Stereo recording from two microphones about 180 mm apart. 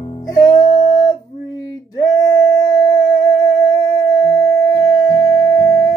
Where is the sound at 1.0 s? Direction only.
20° left (ahead or behind).